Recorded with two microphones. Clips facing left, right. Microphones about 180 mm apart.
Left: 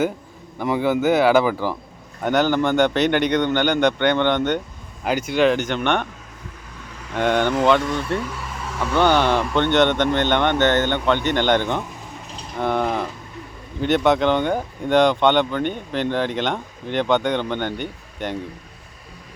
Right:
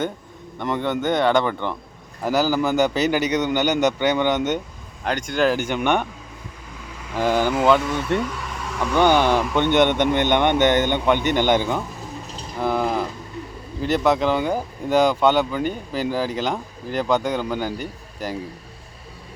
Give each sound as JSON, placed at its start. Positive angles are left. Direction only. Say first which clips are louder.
{"t": 0.6, "sound": "speech", "louder": "left 4 dB", "side_deg": 5}
{"t": 5.0, "sound": "speech", "louder": "left 2 dB", "side_deg": 5}
{"t": 7.1, "sound": "speech", "louder": "left 1 dB", "side_deg": -5}